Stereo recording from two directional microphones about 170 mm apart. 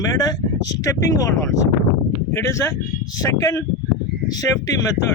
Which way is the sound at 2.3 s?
15° left (ahead or behind).